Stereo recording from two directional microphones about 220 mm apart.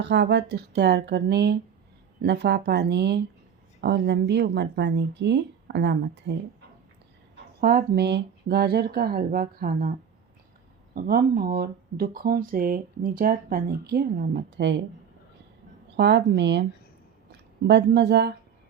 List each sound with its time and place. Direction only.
0.0 s speech: 50° right (ahead or behind)
7.3 s speech: 40° right (ahead or behind)
10.9 s speech: 40° right (ahead or behind)
16.0 s speech: 50° right (ahead or behind)
17.7 s speech: 50° right (ahead or behind)